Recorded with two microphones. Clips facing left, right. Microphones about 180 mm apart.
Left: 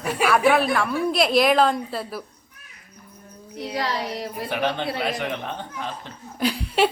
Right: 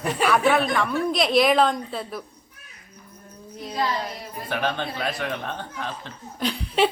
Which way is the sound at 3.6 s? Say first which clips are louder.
Even; 75° left (ahead or behind).